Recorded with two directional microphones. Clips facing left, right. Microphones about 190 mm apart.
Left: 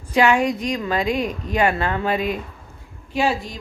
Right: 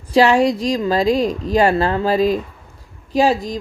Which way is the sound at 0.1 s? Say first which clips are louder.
Right 4 dB; 35° right (ahead or behind).